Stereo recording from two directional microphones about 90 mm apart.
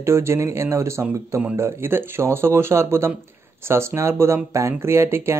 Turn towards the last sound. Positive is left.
turn(degrees=-30)  # may be behind; listen again after turning